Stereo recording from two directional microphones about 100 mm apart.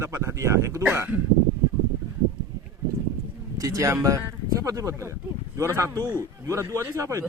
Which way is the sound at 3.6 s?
35° right (ahead or behind).